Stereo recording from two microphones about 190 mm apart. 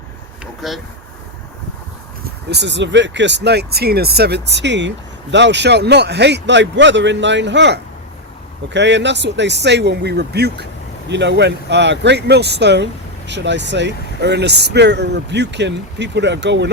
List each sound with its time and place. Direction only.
0.6 s speech: centre (ahead or behind)
2.2 s speech: 60° right (ahead or behind)